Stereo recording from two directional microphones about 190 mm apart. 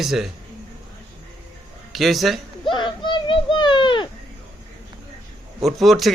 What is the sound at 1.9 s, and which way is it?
Speech, centre (ahead or behind).